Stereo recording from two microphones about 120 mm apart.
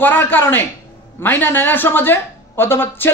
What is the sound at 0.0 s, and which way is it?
A woman's voice, 15° left (ahead or behind).